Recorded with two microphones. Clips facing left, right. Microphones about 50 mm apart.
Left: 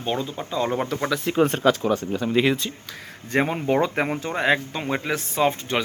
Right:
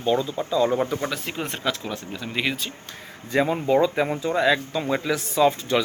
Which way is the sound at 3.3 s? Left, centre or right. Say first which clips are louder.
Right 1 dB; left.